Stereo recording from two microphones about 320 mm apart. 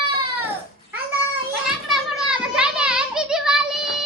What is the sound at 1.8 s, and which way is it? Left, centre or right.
Children playing, centre.